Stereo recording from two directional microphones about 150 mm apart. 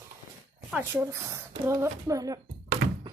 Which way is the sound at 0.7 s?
10° right (ahead or behind).